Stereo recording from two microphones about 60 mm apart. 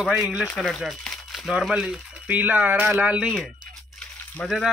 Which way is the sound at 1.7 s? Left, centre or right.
Centre.